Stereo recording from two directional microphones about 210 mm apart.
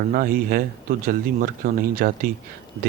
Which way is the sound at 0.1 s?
45° right (ahead or behind).